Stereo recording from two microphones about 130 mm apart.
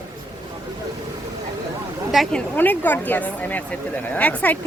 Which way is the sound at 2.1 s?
5° left (ahead or behind).